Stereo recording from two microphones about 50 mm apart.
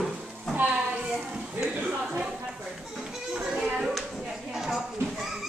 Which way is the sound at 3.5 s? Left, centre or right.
Centre.